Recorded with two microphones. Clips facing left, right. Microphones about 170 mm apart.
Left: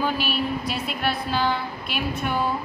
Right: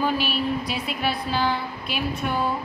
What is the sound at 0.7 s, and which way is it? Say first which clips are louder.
A woman's voice: even; centre (ahead or behind).